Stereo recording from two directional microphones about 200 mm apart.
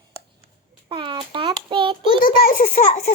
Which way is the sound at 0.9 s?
25° right (ahead or behind).